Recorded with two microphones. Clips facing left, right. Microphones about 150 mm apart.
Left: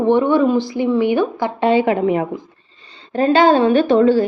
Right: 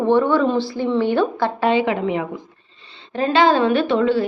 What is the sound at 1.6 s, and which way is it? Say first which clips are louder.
A woman's voice: left 5 dB; 35° left (ahead or behind).